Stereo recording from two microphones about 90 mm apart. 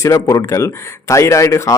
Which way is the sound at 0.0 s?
40° left (ahead or behind).